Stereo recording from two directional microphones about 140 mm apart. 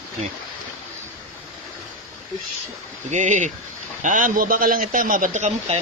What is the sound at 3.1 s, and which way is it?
Speech, 60° right (ahead or behind).